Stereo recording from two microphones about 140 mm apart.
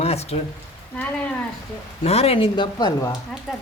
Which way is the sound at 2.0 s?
45° left (ahead or behind).